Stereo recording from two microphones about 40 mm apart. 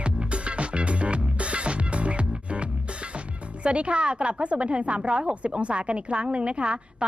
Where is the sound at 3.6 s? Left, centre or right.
Right.